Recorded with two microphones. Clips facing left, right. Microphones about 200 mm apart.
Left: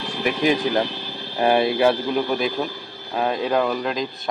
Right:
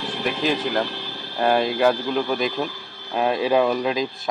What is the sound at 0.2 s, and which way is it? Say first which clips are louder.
Speech: left 4 dB; 15° left (ahead or behind).